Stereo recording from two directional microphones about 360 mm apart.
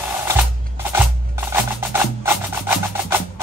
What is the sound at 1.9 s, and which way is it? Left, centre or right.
Music, centre.